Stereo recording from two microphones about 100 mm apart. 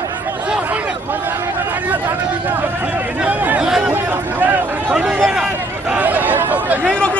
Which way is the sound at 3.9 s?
20° right (ahead or behind).